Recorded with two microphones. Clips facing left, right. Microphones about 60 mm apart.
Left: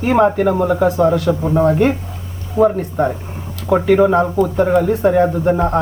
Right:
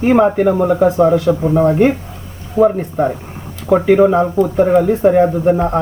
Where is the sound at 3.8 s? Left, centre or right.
Centre.